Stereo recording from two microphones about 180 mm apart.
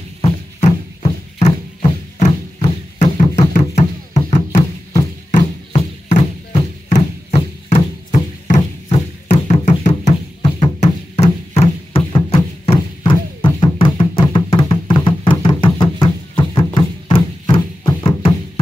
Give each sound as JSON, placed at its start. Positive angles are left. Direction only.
{"t": 0.2, "sound": "music", "side_deg": 35}